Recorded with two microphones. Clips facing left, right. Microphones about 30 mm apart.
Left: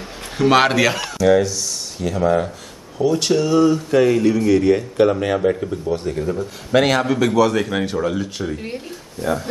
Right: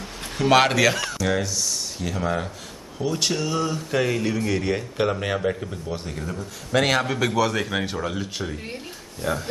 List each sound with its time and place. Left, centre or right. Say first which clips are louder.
0.4 s speech: left 3 dB; centre
6.2 s speech: left 8 dB; centre
6.9 s speech: left 5 dB; centre